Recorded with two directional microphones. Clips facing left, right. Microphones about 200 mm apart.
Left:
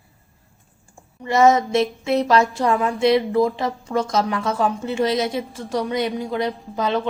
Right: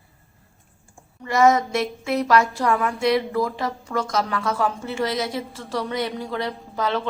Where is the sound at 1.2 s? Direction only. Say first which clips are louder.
Left 2 dB; 25° left (ahead or behind).